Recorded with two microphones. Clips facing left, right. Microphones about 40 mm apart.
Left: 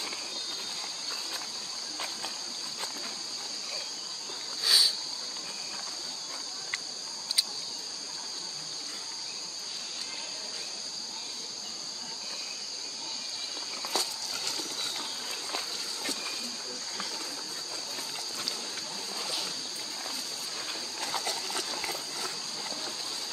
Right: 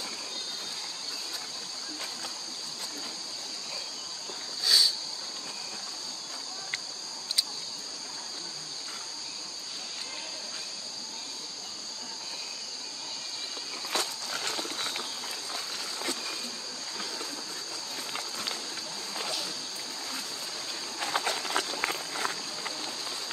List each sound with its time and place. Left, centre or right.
4.6 s a sound: centre
13.9 s walk: right
21.0 s patter: right
21.8 s walk: right